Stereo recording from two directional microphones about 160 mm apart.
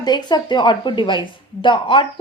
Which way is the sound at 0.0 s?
25° left (ahead or behind).